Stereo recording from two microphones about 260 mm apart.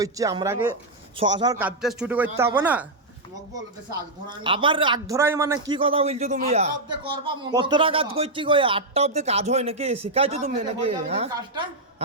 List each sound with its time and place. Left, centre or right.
0.0 s a man's voice: centre
3.9 s a man's voice: centre